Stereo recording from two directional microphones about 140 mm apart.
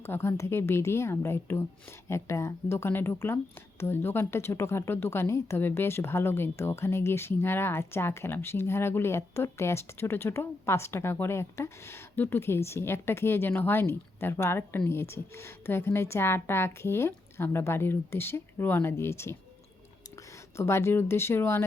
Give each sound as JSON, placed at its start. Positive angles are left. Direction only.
{"t": 0.0, "sound": "speech", "side_deg": 15}
{"t": 20.6, "sound": "speech", "side_deg": 20}